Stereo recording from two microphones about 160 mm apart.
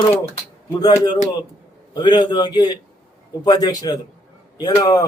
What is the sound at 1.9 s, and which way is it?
Speech, 25° left (ahead or behind).